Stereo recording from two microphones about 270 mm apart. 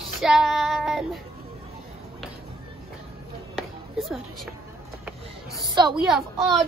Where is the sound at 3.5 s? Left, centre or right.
Centre.